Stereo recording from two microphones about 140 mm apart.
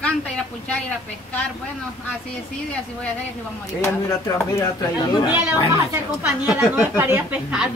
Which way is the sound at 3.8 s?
20° left (ahead or behind).